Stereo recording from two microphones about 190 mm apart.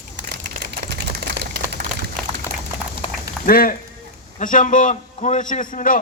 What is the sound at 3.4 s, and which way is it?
A man's voice, 50° left (ahead or behind).